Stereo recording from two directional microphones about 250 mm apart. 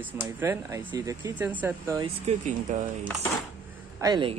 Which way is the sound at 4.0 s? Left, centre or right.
Centre.